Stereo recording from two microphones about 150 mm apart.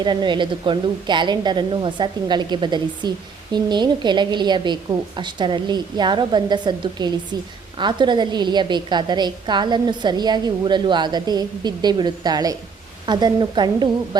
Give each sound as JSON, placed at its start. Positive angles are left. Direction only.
{"t": 0.0, "sound": "a woman's voice", "side_deg": -30}